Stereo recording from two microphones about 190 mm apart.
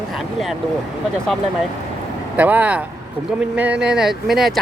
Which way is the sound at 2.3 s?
10° right (ahead or behind).